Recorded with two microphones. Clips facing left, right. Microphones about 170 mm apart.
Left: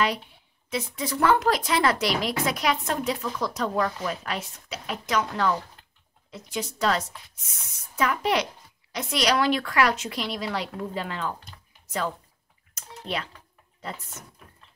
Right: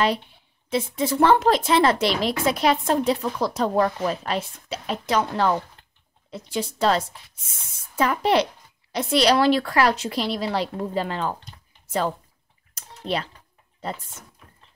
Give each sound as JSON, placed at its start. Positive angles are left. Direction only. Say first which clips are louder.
{"t": 0.7, "sound": "speech", "louder": "right 6 dB", "side_deg": -30}
{"t": 12.7, "sound": "a sound", "louder": "right 5 dB", "side_deg": -30}
{"t": 13.7, "sound": "speech", "louder": "right 5 dB", "side_deg": -30}